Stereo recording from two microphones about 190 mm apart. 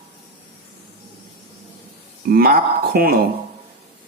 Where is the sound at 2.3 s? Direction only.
55° right (ahead or behind).